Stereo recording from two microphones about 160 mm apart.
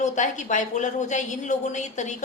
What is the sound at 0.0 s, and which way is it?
A woman's voice, 50° left (ahead or behind).